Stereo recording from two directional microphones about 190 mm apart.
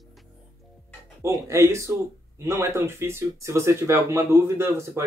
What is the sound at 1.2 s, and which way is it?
Speech, 15° right (ahead or behind).